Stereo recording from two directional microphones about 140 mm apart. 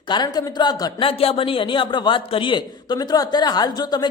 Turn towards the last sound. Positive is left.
turn(degrees=30)  # may be behind; listen again after turning